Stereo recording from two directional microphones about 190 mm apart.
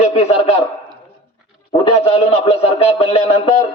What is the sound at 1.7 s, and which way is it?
A man's voice, 30° left (ahead or behind).